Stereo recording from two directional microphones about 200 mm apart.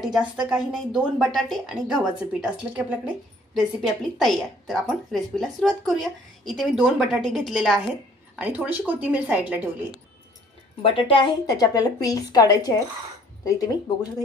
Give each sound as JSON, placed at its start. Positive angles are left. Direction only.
{"t": 0.0, "sound": "a woman's voice", "side_deg": -5}
{"t": 10.8, "sound": "a woman's voice", "side_deg": 25}